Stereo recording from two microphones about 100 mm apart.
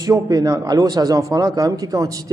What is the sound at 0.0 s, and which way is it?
A man's voice, 35° right (ahead or behind).